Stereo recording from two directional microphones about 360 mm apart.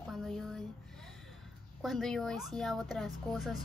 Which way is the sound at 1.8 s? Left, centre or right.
Centre.